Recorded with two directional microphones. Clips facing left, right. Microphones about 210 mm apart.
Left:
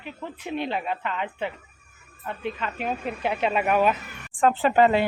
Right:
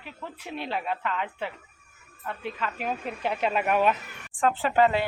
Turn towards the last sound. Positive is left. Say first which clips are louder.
# left 3 dB
turn(degrees=20)  # may be behind; listen again after turning